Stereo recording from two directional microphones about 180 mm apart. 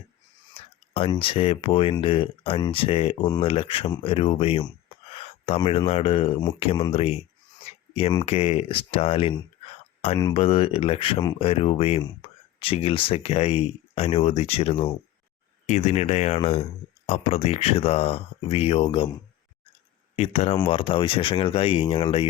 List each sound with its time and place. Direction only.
0.5 s speech: 30° left (ahead or behind)
7.6 s a sound: 35° left (ahead or behind)
8.2 s speech: 35° left (ahead or behind)
10.2 s speech: 20° left (ahead or behind)
10.4 s speech: 30° left (ahead or behind)
12.2 s a sound: 30° left (ahead or behind)
12.5 s speech: 30° left (ahead or behind)
20.1 s speech: 35° left (ahead or behind)